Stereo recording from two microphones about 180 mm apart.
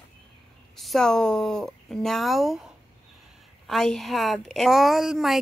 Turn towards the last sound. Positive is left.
turn(degrees=0)  # may be behind; listen again after turning